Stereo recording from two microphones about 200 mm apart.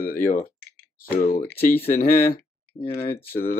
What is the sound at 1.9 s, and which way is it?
Speech, 45° left (ahead or behind).